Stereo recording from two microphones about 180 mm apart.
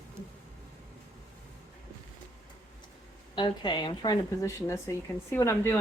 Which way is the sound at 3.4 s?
25° left (ahead or behind).